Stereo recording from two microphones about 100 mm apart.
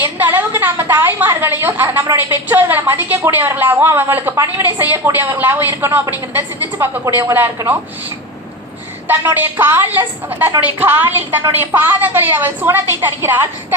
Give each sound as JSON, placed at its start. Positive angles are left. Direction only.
{"t": 0.0, "sound": "a woman's voice", "side_deg": -20}
{"t": 9.0, "sound": "a woman's voice", "side_deg": -20}